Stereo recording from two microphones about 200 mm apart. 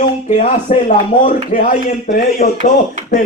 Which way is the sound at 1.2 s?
40° left (ahead or behind).